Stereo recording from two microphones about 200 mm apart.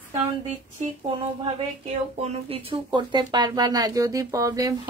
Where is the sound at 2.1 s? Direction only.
30° right (ahead or behind).